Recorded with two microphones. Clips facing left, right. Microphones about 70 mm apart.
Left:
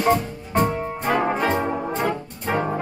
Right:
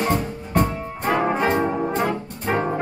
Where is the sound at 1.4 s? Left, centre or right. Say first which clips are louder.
Right 2 dB; centre.